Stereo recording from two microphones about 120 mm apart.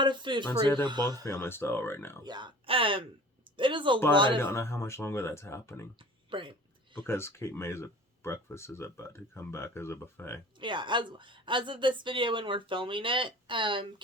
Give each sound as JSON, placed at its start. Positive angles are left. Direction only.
{"t": 0.0, "sound": "speech", "side_deg": -40}
{"t": 1.2, "sound": "speech", "side_deg": 20}
{"t": 2.2, "sound": "a woman's voice", "side_deg": -40}
{"t": 4.4, "sound": "speech", "side_deg": 20}
{"t": 6.0, "sound": "a sound", "side_deg": -45}
{"t": 7.0, "sound": "speech", "side_deg": 20}
{"t": 10.6, "sound": "a woman's voice", "side_deg": -40}